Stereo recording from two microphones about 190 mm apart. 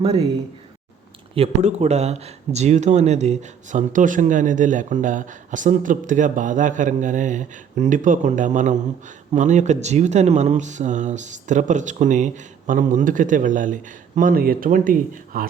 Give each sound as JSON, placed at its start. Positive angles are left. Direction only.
{"t": 0.0, "sound": "speech", "side_deg": -30}
{"t": 1.4, "sound": "speech", "side_deg": -35}